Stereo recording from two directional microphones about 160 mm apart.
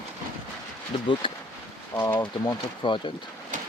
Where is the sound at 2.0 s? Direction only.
20° left (ahead or behind).